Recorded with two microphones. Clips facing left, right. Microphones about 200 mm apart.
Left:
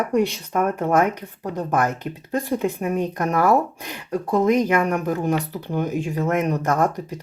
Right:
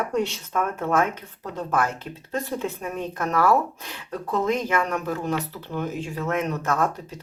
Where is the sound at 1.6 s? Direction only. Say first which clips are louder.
Left 3 dB; 20° left (ahead or behind).